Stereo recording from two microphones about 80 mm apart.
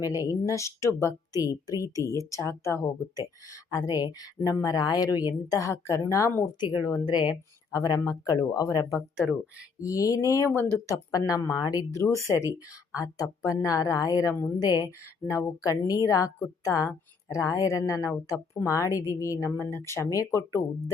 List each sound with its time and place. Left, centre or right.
0.0 s speech: left
1.3 s speech: left
3.2 s speech: left
6.4 s a woman's voice: left
7.9 s a woman's voice: left
14.8 s speech: left